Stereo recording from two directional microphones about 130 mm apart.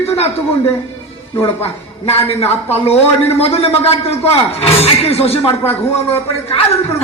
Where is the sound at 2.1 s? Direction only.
50° left (ahead or behind).